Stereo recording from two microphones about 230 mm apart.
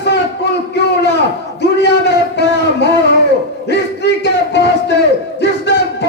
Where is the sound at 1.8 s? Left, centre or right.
Left.